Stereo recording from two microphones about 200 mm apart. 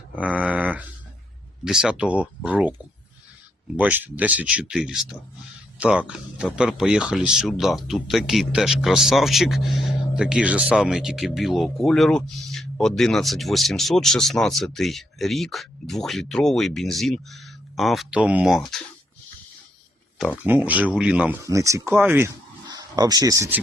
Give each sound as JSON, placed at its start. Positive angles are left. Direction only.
{"t": 0.2, "sound": "a sound", "side_deg": -5}
{"t": 1.6, "sound": "speech", "side_deg": -5}
{"t": 3.8, "sound": "speech", "side_deg": -10}
{"t": 20.4, "sound": "speech", "side_deg": -10}